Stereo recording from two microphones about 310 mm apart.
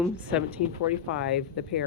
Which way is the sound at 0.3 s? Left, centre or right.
Centre.